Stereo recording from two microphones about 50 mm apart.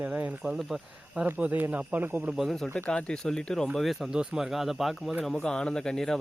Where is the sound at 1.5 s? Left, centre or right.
Right.